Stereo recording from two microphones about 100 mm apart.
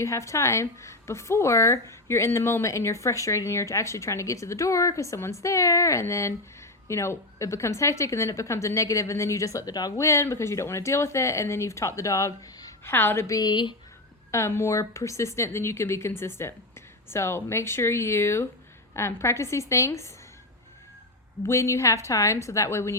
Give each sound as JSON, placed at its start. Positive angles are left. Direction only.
{"t": 0.0, "sound": "a woman's voice", "side_deg": 30}
{"t": 10.1, "sound": "a woman's voice", "side_deg": 25}
{"t": 12.8, "sound": "a woman's voice", "side_deg": 20}
{"t": 13.4, "sound": "speech", "side_deg": 50}
{"t": 14.3, "sound": "a woman's voice", "side_deg": 30}
{"t": 21.4, "sound": "a woman's voice", "side_deg": 30}